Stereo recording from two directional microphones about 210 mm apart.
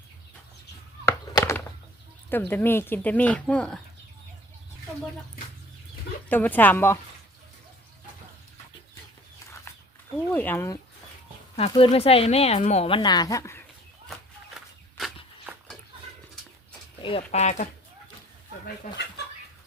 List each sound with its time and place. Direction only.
1.0 s a sound: 15° left (ahead or behind)
2.3 s speech: 10° left (ahead or behind)
6.2 s speech: 10° left (ahead or behind)
10.3 s speech: 10° left (ahead or behind)
11.5 s speech: 25° left (ahead or behind)
14.9 s a sound: centre (ahead or behind)
17.0 s speech: 25° left (ahead or behind)